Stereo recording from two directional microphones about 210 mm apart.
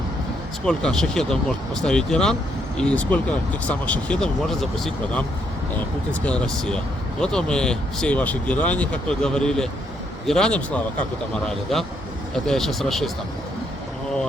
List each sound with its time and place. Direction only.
0.6 s speech: 5° left (ahead or behind)